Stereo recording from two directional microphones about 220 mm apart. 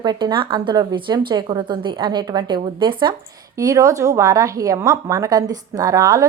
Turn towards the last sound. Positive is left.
turn(degrees=-15)  # may be behind; listen again after turning